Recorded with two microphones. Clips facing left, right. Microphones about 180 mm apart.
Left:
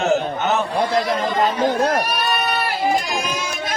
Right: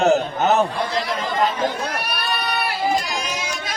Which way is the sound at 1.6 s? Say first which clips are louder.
Left 7 dB; 45° left (ahead or behind).